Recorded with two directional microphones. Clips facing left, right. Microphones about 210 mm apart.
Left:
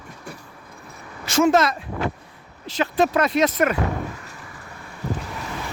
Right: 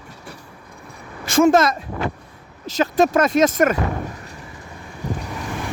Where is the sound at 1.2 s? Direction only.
50° right (ahead or behind).